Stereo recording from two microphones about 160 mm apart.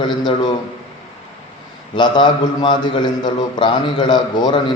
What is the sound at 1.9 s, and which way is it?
A man's voice, 30° left (ahead or behind).